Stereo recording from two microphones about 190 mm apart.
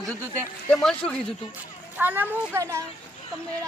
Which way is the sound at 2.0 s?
10° right (ahead or behind).